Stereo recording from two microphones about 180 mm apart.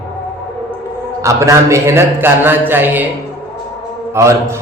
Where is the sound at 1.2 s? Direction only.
15° right (ahead or behind).